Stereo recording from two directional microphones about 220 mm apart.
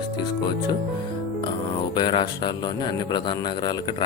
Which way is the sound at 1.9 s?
20° left (ahead or behind).